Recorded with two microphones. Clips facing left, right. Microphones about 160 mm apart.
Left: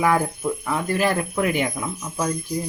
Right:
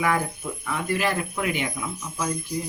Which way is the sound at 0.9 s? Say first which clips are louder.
Left 3 dB; 45° left (ahead or behind).